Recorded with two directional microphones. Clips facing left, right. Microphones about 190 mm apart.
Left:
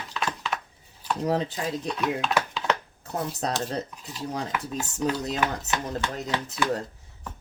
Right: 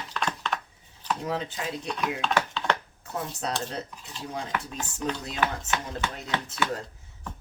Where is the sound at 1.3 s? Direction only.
40° left (ahead or behind).